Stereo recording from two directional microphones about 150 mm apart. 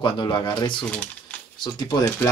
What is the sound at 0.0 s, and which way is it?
Speech, 30° left (ahead or behind).